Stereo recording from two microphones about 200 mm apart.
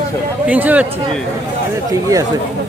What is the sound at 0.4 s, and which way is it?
Speech, 10° right (ahead or behind).